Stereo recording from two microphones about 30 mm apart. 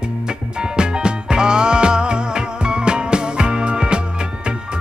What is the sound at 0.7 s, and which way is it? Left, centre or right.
Music, right.